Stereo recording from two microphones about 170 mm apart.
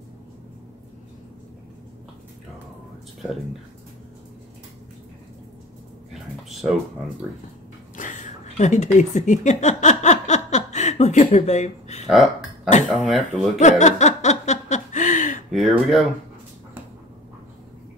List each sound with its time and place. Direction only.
6.5 s speech: centre (ahead or behind)
7.9 s a sound: 50° left (ahead or behind)
8.9 s speech: 45° left (ahead or behind)
12.8 s speech: centre (ahead or behind)
13.6 s a sound: 45° left (ahead or behind)
15.5 s speech: centre (ahead or behind)